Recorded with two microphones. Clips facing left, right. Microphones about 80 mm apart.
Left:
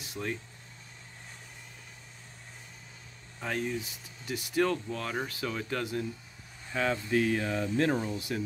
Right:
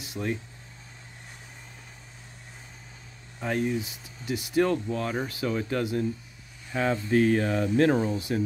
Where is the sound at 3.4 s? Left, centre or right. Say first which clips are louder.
Right 5 dB; centre.